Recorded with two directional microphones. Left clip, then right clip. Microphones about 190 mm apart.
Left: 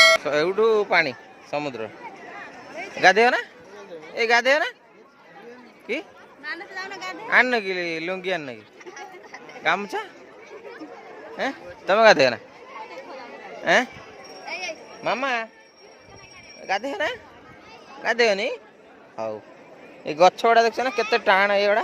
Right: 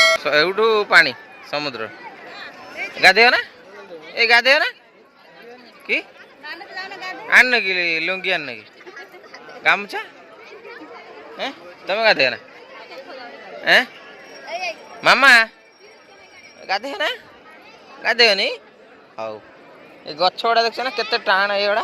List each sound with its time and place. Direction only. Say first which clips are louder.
0.0 s speech: right 2 dB; 5° left (ahead or behind)
2.7 s a sound: right 5 dB; 50° left (ahead or behind)
3.0 s a man's voice: right 4 dB; 15° left (ahead or behind)
5.9 s a man's voice: right 7 dB; 15° left (ahead or behind)
6.4 s chatter: right 1 dB; 60° left (ahead or behind)
7.3 s a man's voice: right 6 dB; 20° left (ahead or behind)
9.6 s speech: right 5 dB; 20° left (ahead or behind)
11.3 s a man's voice: even; 35° left (ahead or behind)
13.7 s speech: right 5 dB; 20° left (ahead or behind)
15.0 s a man's voice: right 13 dB; 5° right (ahead or behind)
16.6 s a man's voice: right 3 dB; 20° left (ahead or behind)
19.1 s a man's voice: right 1 dB; 25° left (ahead or behind)
20.4 s speech: even; 30° left (ahead or behind)